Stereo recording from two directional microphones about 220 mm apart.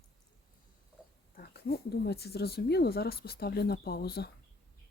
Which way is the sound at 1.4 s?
45° left (ahead or behind).